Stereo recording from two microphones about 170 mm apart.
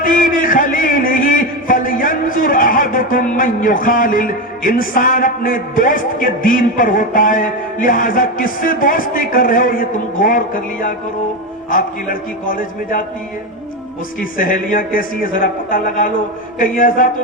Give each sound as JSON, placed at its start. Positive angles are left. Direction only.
{"t": 0.0, "sound": "a man's voice", "side_deg": 55}
{"t": 14.2, "sound": "speech", "side_deg": 55}